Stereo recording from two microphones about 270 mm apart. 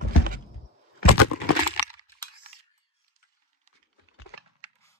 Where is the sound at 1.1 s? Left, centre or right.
Left.